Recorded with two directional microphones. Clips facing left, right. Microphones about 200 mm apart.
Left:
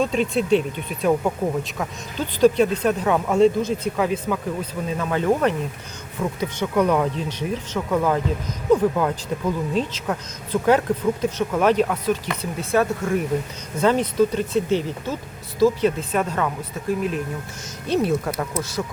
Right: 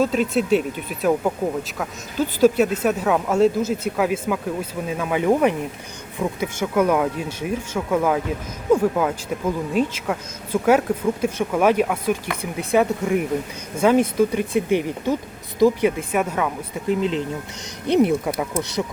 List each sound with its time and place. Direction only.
0.0 s speech: 5° right (ahead or behind)
16.9 s speech: 25° right (ahead or behind)